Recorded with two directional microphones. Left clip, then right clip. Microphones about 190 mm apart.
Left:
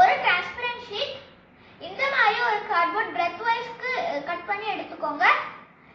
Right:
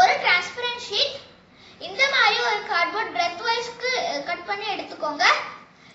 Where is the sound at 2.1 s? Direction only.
15° right (ahead or behind).